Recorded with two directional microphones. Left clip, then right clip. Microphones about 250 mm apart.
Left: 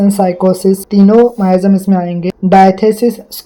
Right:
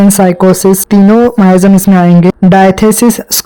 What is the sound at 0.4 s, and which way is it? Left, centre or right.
Speech, right.